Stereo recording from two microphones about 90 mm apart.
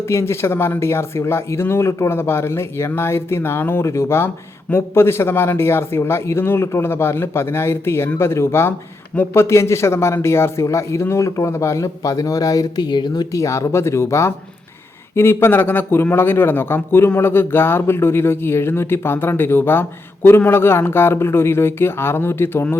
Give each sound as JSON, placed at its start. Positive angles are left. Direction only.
{"t": 0.0, "sound": "a man's voice", "side_deg": 30}
{"t": 12.9, "sound": "speech", "side_deg": 55}
{"t": 13.3, "sound": "a man's voice", "side_deg": 35}